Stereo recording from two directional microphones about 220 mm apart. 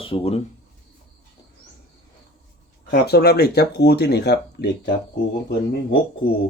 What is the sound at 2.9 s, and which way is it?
Speech, 45° left (ahead or behind).